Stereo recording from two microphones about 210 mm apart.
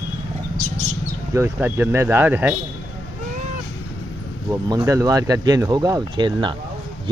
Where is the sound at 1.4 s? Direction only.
10° right (ahead or behind).